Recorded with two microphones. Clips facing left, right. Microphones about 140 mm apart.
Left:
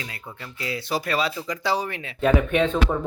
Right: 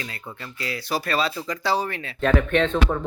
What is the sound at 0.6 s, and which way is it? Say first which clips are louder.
Speech: even; 20° left (ahead or behind).